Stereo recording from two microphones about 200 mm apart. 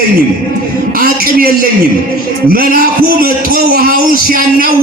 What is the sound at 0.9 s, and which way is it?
A man's voice, 45° right (ahead or behind).